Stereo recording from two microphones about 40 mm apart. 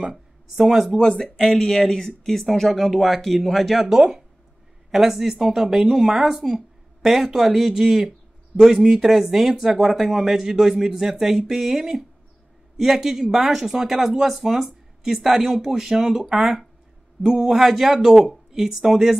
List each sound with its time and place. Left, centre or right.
0.6 s speech: centre
0.9 s speech: centre
3.8 s speech: centre